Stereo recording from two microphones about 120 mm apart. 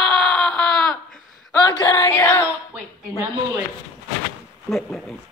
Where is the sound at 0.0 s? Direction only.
5° left (ahead or behind).